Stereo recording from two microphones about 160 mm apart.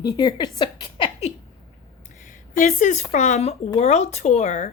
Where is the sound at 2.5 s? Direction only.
55° left (ahead or behind).